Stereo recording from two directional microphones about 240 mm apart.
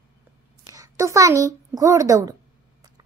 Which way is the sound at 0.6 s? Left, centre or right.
Centre.